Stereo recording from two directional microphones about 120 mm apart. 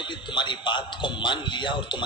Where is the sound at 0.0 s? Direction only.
40° left (ahead or behind).